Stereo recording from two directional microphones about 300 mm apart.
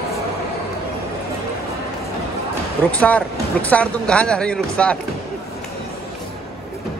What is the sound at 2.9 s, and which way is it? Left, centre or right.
Speech, centre.